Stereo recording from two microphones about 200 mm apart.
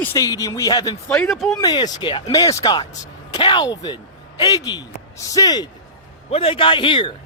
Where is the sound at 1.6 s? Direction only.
20° left (ahead or behind).